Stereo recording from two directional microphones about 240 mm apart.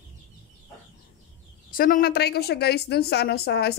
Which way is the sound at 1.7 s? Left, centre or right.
Left.